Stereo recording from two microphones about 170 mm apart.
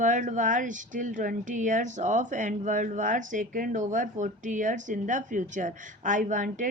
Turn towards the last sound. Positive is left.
turn(degrees=-50)  # may be behind; listen again after turning